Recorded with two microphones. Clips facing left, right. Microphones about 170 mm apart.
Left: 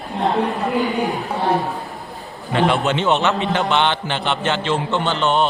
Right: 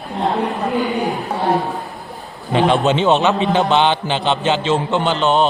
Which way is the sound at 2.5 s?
20° right (ahead or behind).